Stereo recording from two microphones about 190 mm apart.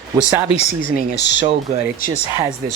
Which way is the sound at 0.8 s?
65° left (ahead or behind).